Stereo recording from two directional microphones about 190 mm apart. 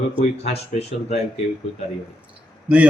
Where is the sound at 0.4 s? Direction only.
35° left (ahead or behind).